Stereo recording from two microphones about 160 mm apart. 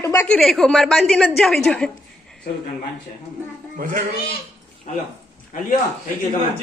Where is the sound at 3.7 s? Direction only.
60° right (ahead or behind).